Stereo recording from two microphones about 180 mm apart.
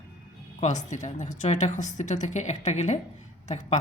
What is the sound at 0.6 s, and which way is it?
Speech, 40° left (ahead or behind).